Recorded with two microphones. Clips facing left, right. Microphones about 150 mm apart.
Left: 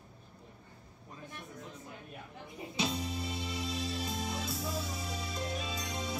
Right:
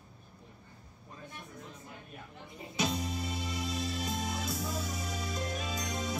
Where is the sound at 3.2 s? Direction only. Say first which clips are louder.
Right 1 dB; 30° left (ahead or behind).